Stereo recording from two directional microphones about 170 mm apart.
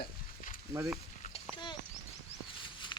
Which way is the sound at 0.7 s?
20° right (ahead or behind).